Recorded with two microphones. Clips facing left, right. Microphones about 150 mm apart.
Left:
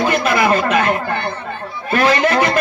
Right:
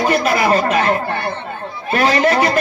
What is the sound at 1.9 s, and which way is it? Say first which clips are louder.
Speech: even; 30° right (ahead or behind).